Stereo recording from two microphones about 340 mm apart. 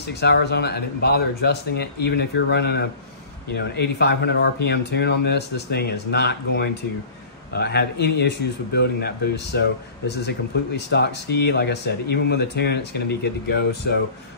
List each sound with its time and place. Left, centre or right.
0.0 s speech: left